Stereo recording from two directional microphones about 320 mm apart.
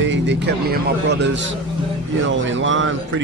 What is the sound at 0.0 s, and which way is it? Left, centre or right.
Speech, right.